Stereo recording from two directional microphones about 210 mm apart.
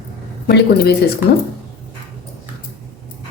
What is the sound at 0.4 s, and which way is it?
Speech, 50° left (ahead or behind).